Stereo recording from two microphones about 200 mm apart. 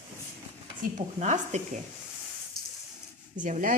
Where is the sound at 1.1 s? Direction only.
35° right (ahead or behind).